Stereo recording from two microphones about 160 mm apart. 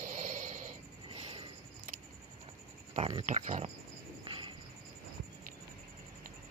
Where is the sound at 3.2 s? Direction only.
45° right (ahead or behind).